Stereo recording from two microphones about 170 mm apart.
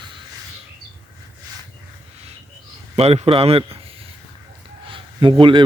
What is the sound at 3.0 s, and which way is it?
A man's voice, 35° right (ahead or behind).